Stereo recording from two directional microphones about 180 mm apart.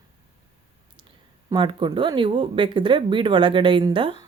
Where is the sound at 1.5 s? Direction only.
25° right (ahead or behind).